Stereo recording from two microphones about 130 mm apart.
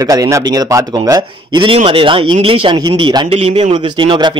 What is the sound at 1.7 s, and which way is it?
Speech, 45° right (ahead or behind).